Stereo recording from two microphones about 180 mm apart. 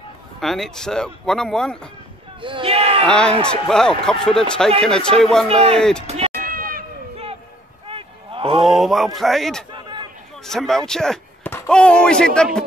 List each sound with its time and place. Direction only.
0.4 s speech: centre (ahead or behind)
2.4 s a sound: 30° right (ahead or behind)
3.1 s speech: 5° left (ahead or behind)
5.5 s a man's voice: 35° right (ahead or behind)
5.8 s speech: 5° left (ahead or behind)
6.0 s speech: 35° right (ahead or behind)
6.4 s cat: 50° right (ahead or behind)
7.9 s cattle: 30° right (ahead or behind)
8.6 s a sound: centre (ahead or behind)
9.7 s a sound: 25° right (ahead or behind)
10.4 s speech: centre (ahead or behind)